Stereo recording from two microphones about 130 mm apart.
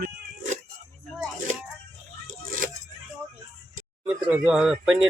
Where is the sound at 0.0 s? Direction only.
65° right (ahead or behind).